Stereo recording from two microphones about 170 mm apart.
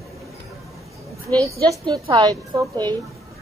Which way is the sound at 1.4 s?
25° right (ahead or behind).